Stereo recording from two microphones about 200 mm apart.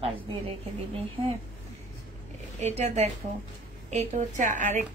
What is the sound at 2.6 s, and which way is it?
A woman's voice, 35° right (ahead or behind).